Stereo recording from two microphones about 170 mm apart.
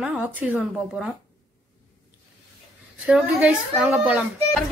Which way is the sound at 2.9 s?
5° right (ahead or behind).